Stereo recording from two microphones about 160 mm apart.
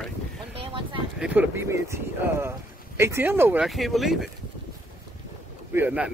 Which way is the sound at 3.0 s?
15° right (ahead or behind).